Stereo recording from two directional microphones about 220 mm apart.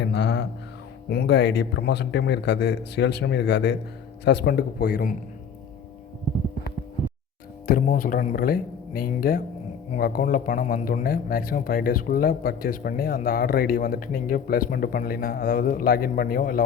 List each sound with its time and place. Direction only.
0.0 s a sound: 50° left (ahead or behind)
1.1 s a man's voice: 50° left (ahead or behind)
7.7 s speech: 40° left (ahead or behind)